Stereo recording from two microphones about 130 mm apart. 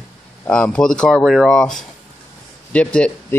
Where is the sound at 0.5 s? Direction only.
5° left (ahead or behind).